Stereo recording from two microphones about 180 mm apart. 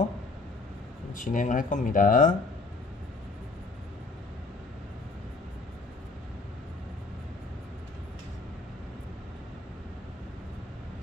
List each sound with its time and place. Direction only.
1.1 s speech: 45° left (ahead or behind)